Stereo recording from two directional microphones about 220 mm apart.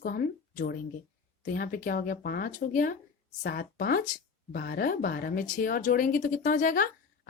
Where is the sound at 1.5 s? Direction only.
40° left (ahead or behind).